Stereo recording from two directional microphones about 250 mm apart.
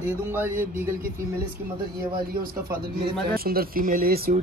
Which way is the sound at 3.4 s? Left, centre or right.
Right.